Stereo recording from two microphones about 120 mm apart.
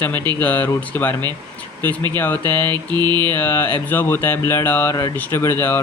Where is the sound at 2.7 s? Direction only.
35° right (ahead or behind).